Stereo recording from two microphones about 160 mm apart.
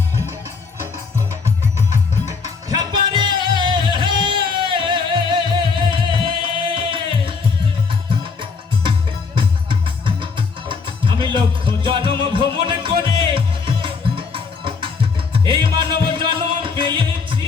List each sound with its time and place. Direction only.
1.9 s music: 45° left (ahead or behind)
2.6 s music: 25° right (ahead or behind)
8.4 s music: 30° right (ahead or behind)